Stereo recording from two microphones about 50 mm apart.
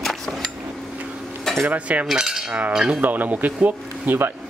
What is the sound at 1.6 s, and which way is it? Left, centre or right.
Speech, right.